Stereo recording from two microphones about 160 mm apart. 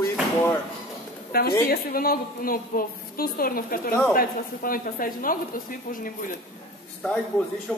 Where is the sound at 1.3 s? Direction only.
75° left (ahead or behind); by 6.3 s 55° left (ahead or behind).